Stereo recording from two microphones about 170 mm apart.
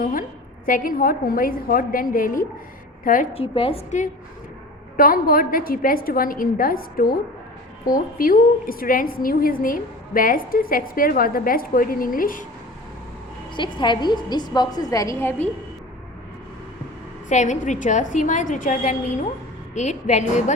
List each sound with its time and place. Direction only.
0.0 s a woman's voice: 55° left (ahead or behind)
3.3 s a woman's voice: 35° left (ahead or behind)
4.9 s a woman's voice: 55° left (ahead or behind)
13.6 s a woman's voice: 30° left (ahead or behind)
17.2 s a woman's voice: 45° left (ahead or behind)